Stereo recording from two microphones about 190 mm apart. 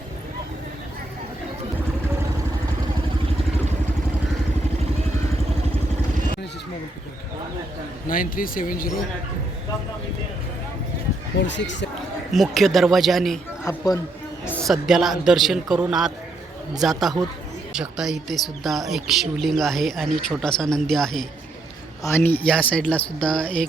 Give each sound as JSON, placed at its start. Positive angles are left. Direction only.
{"t": 8.0, "sound": "speech", "side_deg": 45}
{"t": 11.3, "sound": "speech", "side_deg": 70}
{"t": 12.3, "sound": "speech", "side_deg": 0}
{"t": 13.7, "sound": "speech", "side_deg": 20}
{"t": 14.4, "sound": "speech", "side_deg": 5}